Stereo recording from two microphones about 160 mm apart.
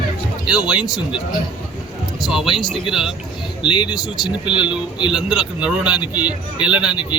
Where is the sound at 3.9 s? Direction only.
5° right (ahead or behind).